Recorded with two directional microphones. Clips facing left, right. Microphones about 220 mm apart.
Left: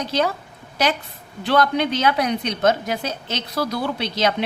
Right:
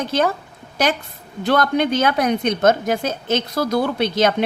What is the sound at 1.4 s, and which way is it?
A woman's voice, 45° right (ahead or behind).